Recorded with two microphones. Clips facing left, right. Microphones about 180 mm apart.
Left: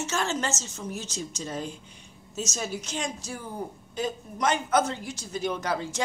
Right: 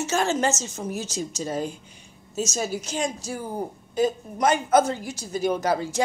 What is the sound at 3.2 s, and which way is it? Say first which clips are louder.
A woman's voice: right 5 dB; 40° right (ahead or behind).